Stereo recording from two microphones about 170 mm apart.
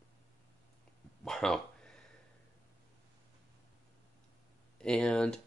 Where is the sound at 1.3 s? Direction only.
5° left (ahead or behind).